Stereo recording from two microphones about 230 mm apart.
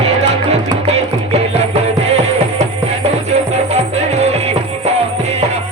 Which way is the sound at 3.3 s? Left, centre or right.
Right.